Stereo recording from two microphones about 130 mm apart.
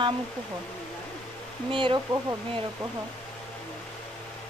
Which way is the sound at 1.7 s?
40° right (ahead or behind).